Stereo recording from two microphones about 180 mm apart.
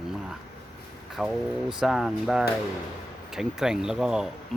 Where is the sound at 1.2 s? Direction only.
5° right (ahead or behind).